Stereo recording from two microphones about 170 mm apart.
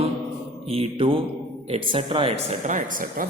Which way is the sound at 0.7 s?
35° right (ahead or behind).